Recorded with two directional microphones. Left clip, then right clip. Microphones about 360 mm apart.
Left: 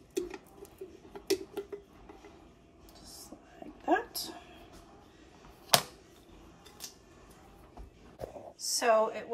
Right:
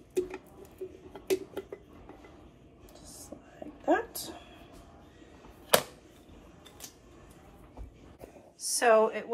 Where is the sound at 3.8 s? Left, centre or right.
Centre.